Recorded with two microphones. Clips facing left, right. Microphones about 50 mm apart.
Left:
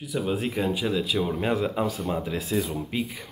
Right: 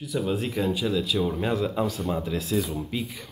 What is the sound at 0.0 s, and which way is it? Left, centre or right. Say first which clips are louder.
Speech: even; centre.